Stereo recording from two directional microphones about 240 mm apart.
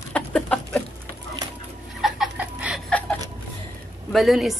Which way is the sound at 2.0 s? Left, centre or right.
Centre.